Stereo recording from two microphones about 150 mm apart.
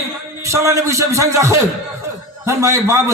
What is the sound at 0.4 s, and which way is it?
A man's voice, 20° right (ahead or behind).